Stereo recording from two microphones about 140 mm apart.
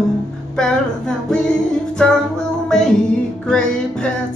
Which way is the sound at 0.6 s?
5° left (ahead or behind).